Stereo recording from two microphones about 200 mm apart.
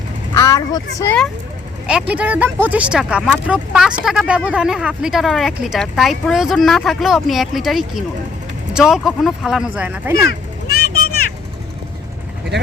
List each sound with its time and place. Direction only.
0.3 s vehicle: 20° left (ahead or behind)
0.9 s speech: 10° left (ahead or behind)
1.9 s speech: 5° right (ahead or behind)
10.7 s vehicle: 45° left (ahead or behind)